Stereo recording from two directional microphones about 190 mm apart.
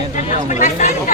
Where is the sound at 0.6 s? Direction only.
40° left (ahead or behind).